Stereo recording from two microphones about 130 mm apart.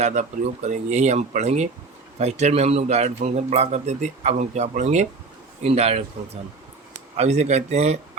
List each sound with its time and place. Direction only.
0.0 s a man's voice: 65° right (ahead or behind)
7.2 s a man's voice: 60° right (ahead or behind)